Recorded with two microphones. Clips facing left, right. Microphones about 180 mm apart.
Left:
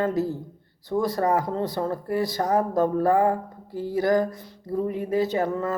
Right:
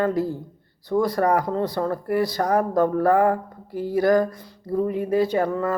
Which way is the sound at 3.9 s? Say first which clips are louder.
Right 3 dB; 20° left (ahead or behind).